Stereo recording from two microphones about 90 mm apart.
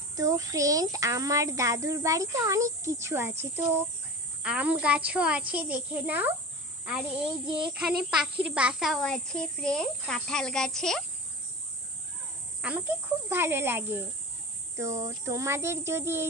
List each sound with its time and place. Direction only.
0.1 s speech: 40° right (ahead or behind)
4.4 s a child's voice: 15° right (ahead or behind)
9.0 s a child's voice: 10° left (ahead or behind)
12.6 s a child's voice: 15° right (ahead or behind)
13.3 s speech: 25° right (ahead or behind)